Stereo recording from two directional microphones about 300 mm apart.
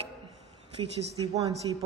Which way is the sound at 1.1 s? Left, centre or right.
Centre.